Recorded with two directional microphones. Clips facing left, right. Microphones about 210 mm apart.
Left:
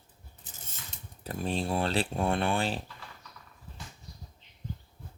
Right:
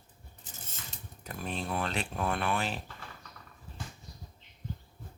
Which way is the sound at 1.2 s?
30° left (ahead or behind).